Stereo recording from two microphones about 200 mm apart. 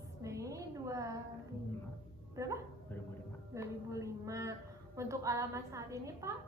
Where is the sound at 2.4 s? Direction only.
15° right (ahead or behind).